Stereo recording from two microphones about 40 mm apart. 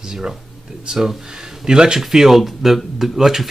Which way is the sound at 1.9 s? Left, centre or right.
Centre.